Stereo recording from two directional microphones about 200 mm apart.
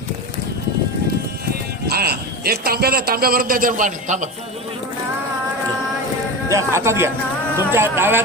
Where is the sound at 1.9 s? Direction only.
50° right (ahead or behind).